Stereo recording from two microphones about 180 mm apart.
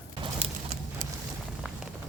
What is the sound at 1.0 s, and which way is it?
Boat, 45° right (ahead or behind).